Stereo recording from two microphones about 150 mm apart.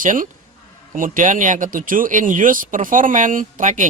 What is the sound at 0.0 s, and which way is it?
Speech, 60° right (ahead or behind).